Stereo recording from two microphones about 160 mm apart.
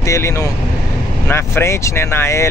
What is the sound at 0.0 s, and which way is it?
Speech, 20° left (ahead or behind).